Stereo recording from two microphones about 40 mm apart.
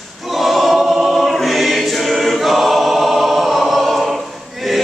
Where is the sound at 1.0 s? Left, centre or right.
Centre.